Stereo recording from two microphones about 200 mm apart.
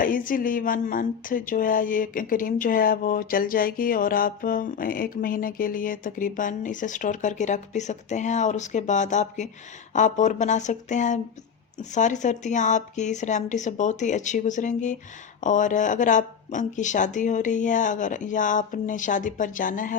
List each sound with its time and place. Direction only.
0.0 s speech: 45° left (ahead or behind)